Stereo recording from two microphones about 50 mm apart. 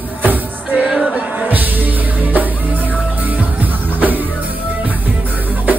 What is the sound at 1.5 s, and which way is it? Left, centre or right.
Music, right.